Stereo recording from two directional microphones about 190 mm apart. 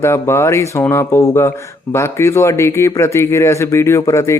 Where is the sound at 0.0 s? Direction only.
15° left (ahead or behind).